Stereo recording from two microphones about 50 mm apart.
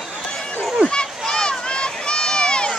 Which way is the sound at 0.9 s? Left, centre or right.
Centre.